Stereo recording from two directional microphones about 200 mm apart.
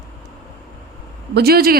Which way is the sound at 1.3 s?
50° right (ahead or behind).